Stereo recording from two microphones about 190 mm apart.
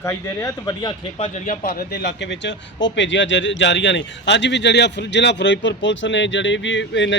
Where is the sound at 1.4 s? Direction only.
45° left (ahead or behind).